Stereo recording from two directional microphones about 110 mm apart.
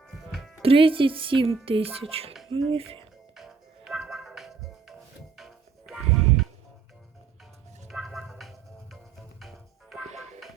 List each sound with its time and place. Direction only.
0.3 s music: centre (ahead or behind)
0.6 s speech: 55° right (ahead or behind)
3.3 s music: 5° right (ahead or behind)
7.9 s music: centre (ahead or behind)
10.1 s music: 90° right